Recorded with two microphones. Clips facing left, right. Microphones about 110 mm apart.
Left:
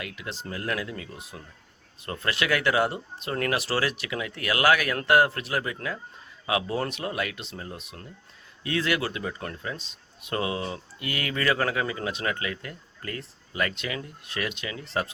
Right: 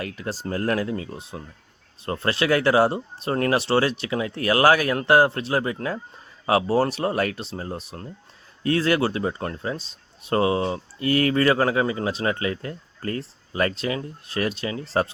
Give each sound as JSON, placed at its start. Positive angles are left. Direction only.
{"t": 0.0, "sound": "speech", "side_deg": -40}